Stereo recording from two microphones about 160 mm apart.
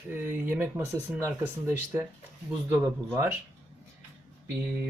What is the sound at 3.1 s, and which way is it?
Speech, 15° right (ahead or behind).